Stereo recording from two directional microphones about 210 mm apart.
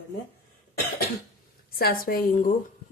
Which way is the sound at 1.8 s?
45° left (ahead or behind).